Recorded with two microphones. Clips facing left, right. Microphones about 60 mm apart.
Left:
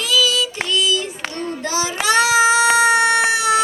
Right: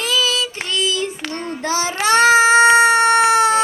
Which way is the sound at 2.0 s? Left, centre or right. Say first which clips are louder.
Right 3 dB; right.